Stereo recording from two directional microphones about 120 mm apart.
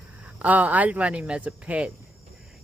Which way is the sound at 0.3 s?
10° right (ahead or behind).